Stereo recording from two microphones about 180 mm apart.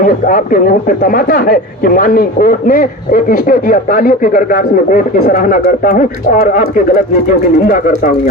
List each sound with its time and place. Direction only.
0.0 s speech: 45° left (ahead or behind)